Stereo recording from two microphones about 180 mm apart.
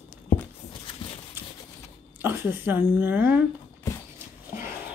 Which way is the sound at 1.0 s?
30° left (ahead or behind).